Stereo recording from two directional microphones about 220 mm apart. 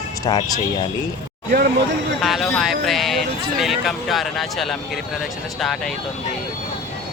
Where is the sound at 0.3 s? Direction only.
20° left (ahead or behind).